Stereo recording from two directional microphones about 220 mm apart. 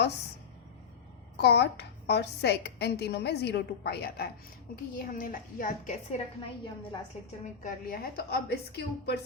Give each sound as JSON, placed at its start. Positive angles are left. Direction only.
{"t": 1.4, "sound": "a woman's voice", "side_deg": 50}
{"t": 7.6, "sound": "a woman's voice", "side_deg": 40}